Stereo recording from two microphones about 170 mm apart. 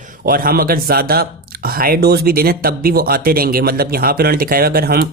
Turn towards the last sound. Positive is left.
turn(degrees=-65)  # may be behind; listen again after turning